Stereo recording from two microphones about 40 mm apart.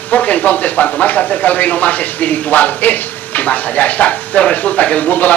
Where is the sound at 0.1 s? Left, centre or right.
Left.